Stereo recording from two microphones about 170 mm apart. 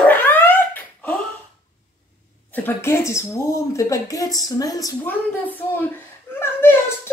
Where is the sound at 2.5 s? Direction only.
15° left (ahead or behind).